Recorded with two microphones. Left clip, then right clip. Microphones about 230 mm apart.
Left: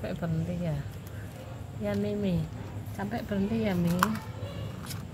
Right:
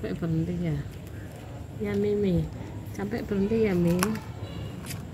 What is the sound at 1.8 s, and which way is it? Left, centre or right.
Speech, centre.